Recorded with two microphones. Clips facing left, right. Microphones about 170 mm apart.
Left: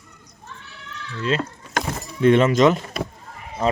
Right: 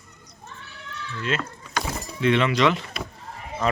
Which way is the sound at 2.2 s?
45° left (ahead or behind).